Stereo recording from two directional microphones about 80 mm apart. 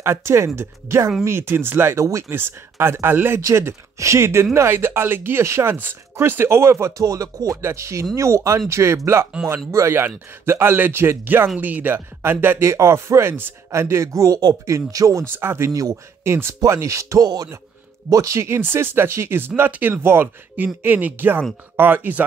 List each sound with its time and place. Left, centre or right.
0.0 s speech: right
7.0 s music: right
7.6 s speech: right
14.7 s music: right
15.2 s speech: right
15.7 s speech: right